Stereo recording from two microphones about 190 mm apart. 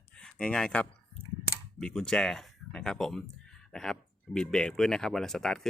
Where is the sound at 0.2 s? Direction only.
5° left (ahead or behind).